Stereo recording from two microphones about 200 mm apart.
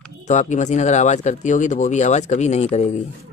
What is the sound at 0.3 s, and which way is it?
Speech, 35° left (ahead or behind).